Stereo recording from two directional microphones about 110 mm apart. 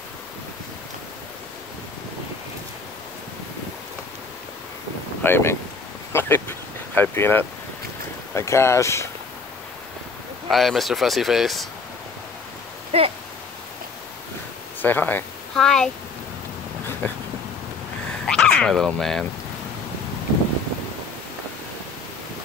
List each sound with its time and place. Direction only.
5.2 s speech: 20° left (ahead or behind)
6.1 s a sound: 20° left (ahead or behind)
7.0 s speech: 20° left (ahead or behind)
10.5 s speech: centre (ahead or behind)
12.9 s speech: 65° right (ahead or behind)
14.8 s speech: 15° left (ahead or behind)
15.5 s speech: 5° left (ahead or behind)
17.0 s a sound: 15° left (ahead or behind)
18.2 s speech: 5° left (ahead or behind)